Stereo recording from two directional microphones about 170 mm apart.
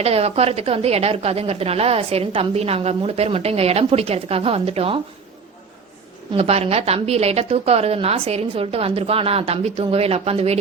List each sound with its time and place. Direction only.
0.0 s a woman's voice: 35° right (ahead or behind)
6.3 s a woman's voice: 35° right (ahead or behind)